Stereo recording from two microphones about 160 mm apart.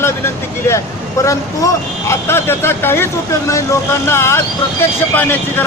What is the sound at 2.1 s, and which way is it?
Speech, 15° left (ahead or behind).